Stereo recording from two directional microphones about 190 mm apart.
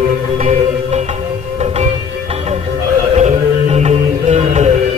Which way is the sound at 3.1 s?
35° right (ahead or behind).